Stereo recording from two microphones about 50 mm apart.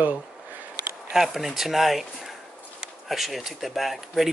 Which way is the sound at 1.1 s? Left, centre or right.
Centre.